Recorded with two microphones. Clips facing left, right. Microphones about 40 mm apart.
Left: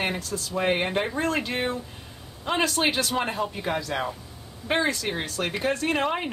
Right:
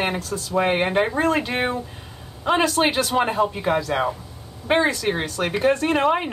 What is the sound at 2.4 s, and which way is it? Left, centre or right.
Speech, centre.